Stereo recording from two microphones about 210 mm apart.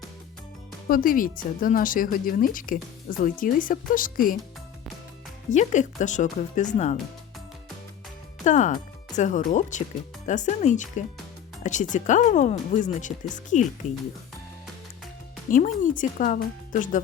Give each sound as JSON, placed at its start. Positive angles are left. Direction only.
{"t": 0.9, "sound": "speech", "side_deg": 40}
{"t": 5.5, "sound": "speech", "side_deg": 35}
{"t": 8.4, "sound": "speech", "side_deg": 35}
{"t": 15.4, "sound": "speech", "side_deg": 40}